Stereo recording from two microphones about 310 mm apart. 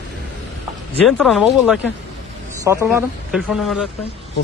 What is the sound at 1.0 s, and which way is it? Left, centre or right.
Speech, centre.